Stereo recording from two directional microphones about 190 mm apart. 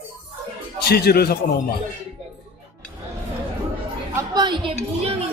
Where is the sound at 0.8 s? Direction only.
55° left (ahead or behind).